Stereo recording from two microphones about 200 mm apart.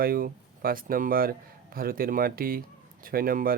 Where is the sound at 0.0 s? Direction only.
45° right (ahead or behind).